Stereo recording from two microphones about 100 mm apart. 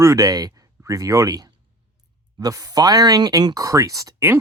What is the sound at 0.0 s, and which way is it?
Speech, 30° right (ahead or behind).